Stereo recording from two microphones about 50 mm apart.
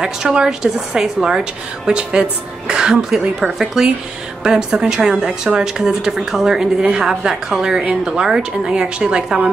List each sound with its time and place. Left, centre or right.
0.0 s speech: centre